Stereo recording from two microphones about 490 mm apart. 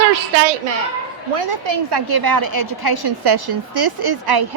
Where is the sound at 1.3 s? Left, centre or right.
Right.